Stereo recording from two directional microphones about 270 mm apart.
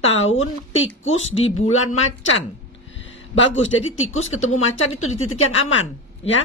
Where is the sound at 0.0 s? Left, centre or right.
Left.